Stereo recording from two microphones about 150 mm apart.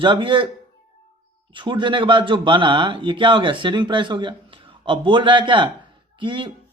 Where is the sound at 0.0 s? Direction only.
35° right (ahead or behind).